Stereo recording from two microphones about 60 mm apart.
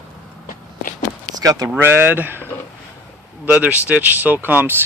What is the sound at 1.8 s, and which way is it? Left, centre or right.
Speech, right.